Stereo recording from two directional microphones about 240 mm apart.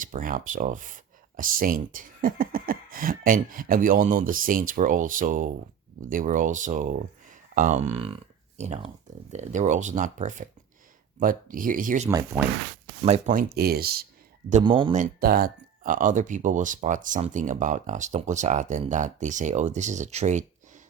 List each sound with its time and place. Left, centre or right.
0.0 s speech: right
12.0 s speech: centre
13.0 s speech: right
14.5 s speech: right
14.9 s speech: right